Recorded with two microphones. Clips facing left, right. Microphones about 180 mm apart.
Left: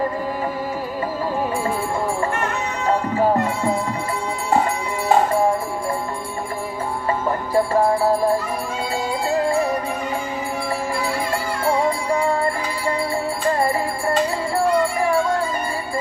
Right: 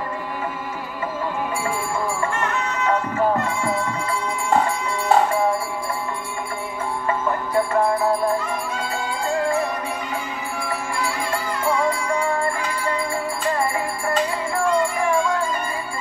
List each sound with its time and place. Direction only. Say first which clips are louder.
7.2 s music: left 3 dB; 35° left (ahead or behind)